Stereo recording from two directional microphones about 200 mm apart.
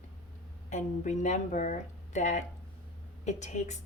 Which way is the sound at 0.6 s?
35° left (ahead or behind).